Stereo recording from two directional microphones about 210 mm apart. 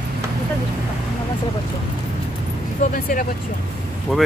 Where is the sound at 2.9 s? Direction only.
40° left (ahead or behind).